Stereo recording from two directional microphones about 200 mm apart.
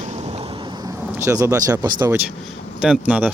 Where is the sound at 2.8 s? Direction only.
5° right (ahead or behind).